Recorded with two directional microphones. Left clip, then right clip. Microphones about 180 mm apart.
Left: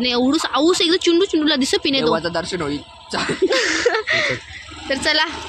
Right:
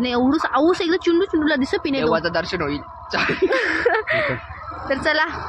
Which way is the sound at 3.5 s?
Centre (ahead or behind).